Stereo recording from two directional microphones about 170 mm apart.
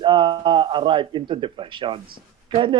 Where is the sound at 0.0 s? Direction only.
30° right (ahead or behind).